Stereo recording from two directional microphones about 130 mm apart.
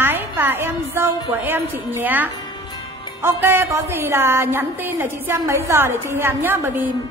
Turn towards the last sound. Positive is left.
turn(degrees=-15)  # may be behind; listen again after turning